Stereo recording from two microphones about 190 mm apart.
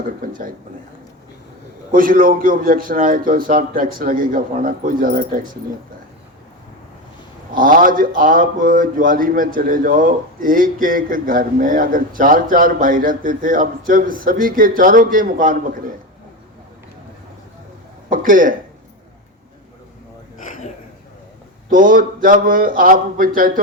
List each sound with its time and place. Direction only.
0.2 s a man's voice: 45° right (ahead or behind)
1.9 s a man's voice: 50° right (ahead or behind)
7.5 s a man's voice: 45° right (ahead or behind)
18.1 s speech: 45° right (ahead or behind)
20.4 s a sound: 40° left (ahead or behind)
21.7 s a man's voice: 45° right (ahead or behind)